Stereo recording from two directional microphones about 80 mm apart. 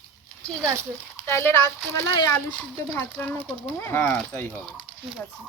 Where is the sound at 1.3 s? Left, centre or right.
Left.